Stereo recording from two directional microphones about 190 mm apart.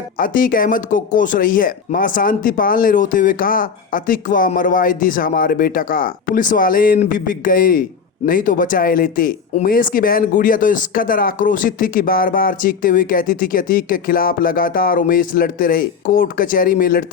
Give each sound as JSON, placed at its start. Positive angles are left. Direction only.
{"t": 0.2, "sound": "speech", "side_deg": 45}